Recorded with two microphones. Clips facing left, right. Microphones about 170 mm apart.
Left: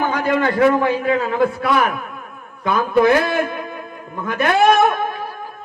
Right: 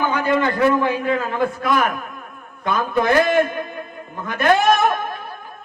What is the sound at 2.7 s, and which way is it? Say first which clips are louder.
A man's voice: left 3 dB; 65° left (ahead or behind).